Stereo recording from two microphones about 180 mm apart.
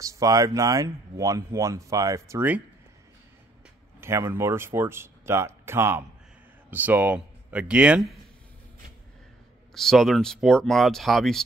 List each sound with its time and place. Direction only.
0.0 s speech: 20° right (ahead or behind)
4.0 s speech: 15° right (ahead or behind)
9.8 s speech: centre (ahead or behind)